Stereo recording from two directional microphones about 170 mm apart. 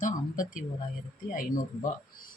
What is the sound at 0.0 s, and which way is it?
Speech, 50° left (ahead or behind).